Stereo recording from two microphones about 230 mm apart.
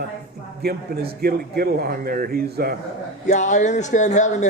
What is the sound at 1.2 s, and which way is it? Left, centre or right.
Speech, right.